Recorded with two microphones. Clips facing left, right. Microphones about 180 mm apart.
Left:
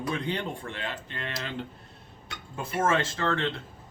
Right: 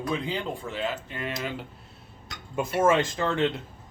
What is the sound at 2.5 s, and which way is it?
Speech, 15° right (ahead or behind).